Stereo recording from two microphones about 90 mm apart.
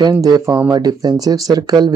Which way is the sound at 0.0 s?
45° right (ahead or behind).